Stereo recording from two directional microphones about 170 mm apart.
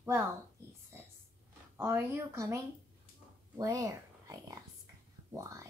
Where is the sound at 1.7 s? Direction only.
15° right (ahead or behind).